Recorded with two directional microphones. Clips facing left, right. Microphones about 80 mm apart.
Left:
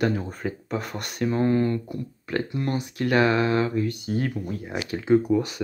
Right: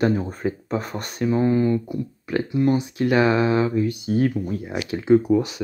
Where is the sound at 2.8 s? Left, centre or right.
Centre.